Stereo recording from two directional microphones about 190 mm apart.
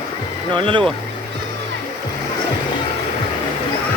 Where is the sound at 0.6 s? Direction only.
25° right (ahead or behind).